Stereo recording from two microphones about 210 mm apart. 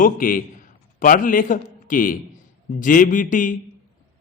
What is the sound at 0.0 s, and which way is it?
A man's voice, 40° left (ahead or behind).